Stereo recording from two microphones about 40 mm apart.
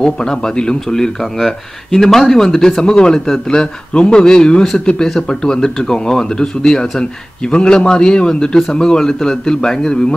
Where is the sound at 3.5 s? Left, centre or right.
Left.